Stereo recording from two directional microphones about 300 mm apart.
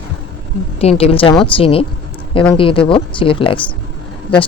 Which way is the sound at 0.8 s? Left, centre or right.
Centre.